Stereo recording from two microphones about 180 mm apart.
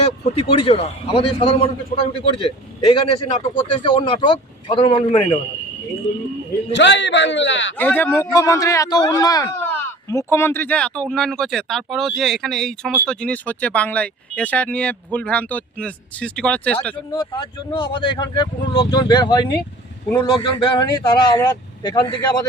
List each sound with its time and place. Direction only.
0.5 s a man's voice: 35° left (ahead or behind)
6.7 s a man's voice: 75° left (ahead or behind)
7.8 s speech: 10° left (ahead or behind)
17.1 s speech: 25° left (ahead or behind)